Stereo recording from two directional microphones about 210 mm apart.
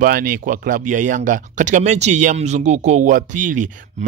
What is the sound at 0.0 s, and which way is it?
Speech, 45° right (ahead or behind).